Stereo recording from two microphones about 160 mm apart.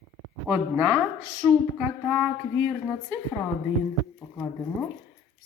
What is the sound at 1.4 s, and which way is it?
Speech, 5° right (ahead or behind).